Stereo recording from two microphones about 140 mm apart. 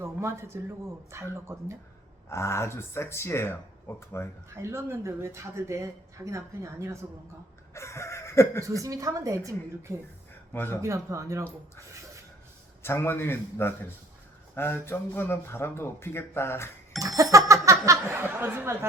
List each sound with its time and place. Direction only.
0.0 s speech: 20° right (ahead or behind)
2.3 s speech: 20° left (ahead or behind)
4.4 s speech: 20° right (ahead or behind)
7.7 s chicken: 20° left (ahead or behind)
8.6 s speech: 25° right (ahead or behind)
10.5 s a man's voice: 15° left (ahead or behind)
10.8 s speech: 20° right (ahead or behind)
12.8 s a man's voice: 15° left (ahead or behind)
17.0 s speech: 25° right (ahead or behind)